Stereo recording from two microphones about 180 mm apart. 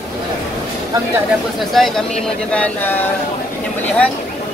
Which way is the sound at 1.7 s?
Centre (ahead or behind).